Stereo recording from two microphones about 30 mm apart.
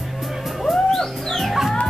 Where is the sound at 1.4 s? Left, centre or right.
Centre.